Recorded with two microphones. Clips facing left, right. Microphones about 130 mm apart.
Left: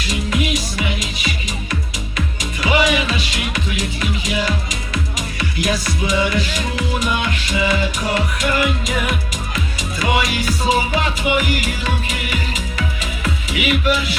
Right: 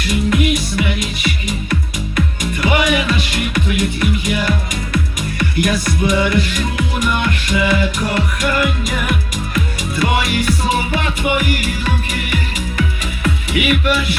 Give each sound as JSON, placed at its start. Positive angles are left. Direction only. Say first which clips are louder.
{"t": 0.0, "sound": "music", "louder": "right 5 dB", "side_deg": -50}
{"t": 13.2, "sound": "music", "louder": "right 4 dB", "side_deg": -55}